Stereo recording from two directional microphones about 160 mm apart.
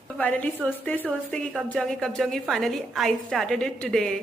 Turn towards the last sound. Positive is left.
turn(degrees=5)  # may be behind; listen again after turning